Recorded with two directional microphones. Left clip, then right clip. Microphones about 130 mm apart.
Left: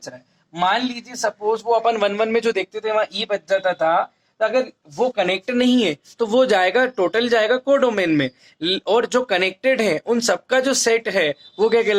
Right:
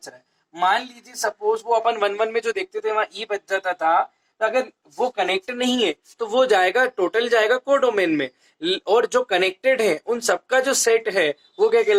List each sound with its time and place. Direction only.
0.5 s speech: 30° left (ahead or behind)